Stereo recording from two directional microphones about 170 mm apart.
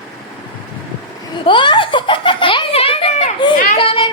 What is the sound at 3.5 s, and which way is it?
Speech, 50° left (ahead or behind).